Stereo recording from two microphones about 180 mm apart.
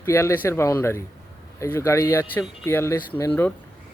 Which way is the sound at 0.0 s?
15° left (ahead or behind).